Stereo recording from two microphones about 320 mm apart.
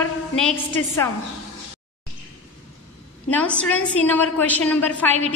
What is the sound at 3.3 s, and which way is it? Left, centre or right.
A woman's voice, centre.